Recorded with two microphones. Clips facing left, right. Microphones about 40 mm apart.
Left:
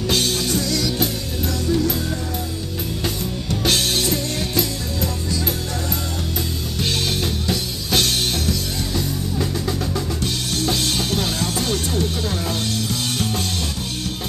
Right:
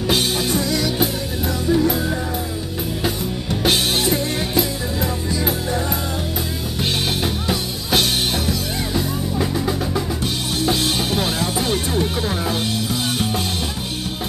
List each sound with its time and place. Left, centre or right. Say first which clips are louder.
0.1 s music: right 2 dB; centre
7.4 s music: right 1 dB; centre